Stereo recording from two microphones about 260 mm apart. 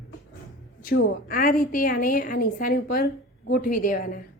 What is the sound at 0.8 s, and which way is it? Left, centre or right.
A woman's voice, left.